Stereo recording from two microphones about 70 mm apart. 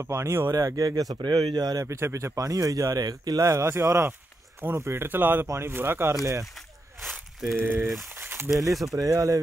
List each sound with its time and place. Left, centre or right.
0.0 s speech: right
0.6 s speech: right
1.9 s speech: right
2.3 s speech: right
3.4 s a man's voice: right
7.1 s a sound: centre
7.5 s speech: right
8.1 s a sound: right
8.8 s speech: right